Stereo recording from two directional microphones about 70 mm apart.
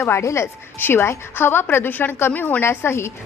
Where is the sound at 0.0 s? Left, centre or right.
Left.